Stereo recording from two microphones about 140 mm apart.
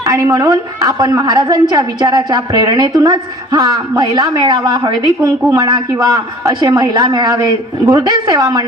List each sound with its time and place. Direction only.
0.0 s a woman's voice: 25° right (ahead or behind)